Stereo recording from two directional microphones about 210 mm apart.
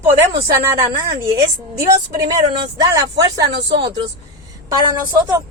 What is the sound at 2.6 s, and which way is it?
Speech, 15° right (ahead or behind).